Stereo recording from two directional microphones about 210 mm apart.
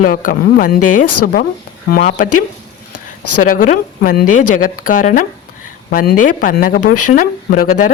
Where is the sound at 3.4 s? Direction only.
40° left (ahead or behind).